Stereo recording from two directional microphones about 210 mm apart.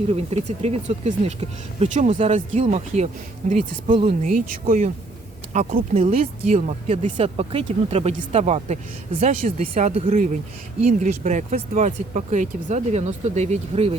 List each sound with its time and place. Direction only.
0.1 s speech: 30° right (ahead or behind)
4.3 s speech: 40° right (ahead or behind)